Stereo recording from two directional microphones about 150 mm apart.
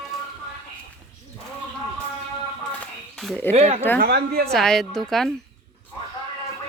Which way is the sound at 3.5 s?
45° right (ahead or behind).